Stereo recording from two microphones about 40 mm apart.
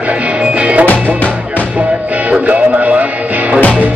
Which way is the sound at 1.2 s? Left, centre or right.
Left.